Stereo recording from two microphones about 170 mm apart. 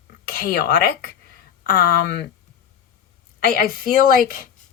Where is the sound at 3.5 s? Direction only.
55° left (ahead or behind).